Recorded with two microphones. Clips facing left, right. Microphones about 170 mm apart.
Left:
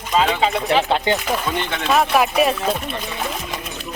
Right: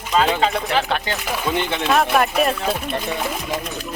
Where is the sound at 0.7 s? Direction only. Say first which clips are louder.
Left 4 dB; 20° left (ahead or behind).